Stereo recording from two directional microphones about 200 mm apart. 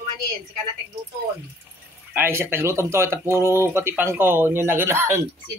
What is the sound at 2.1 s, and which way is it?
Speech, 10° right (ahead or behind).